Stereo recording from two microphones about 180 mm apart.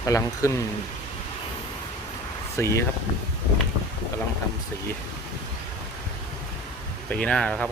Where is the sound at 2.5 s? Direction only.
15° left (ahead or behind).